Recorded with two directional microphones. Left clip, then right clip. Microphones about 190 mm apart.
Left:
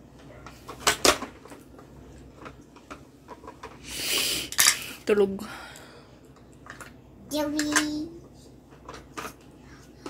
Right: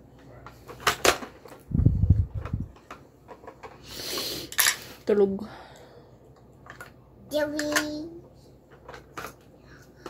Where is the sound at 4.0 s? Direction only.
20° right (ahead or behind).